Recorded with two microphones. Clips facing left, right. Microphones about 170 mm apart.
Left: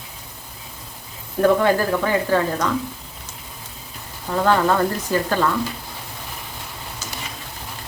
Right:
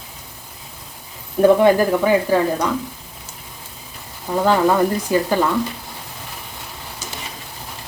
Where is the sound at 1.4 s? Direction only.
15° right (ahead or behind).